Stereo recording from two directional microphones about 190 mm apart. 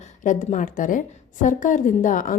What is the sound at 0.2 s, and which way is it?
A woman's voice, 40° left (ahead or behind).